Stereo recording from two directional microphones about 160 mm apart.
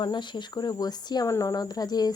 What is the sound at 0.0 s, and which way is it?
Speech, 30° left (ahead or behind).